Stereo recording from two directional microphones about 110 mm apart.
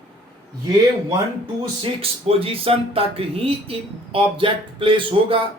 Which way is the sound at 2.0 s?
60° right (ahead or behind).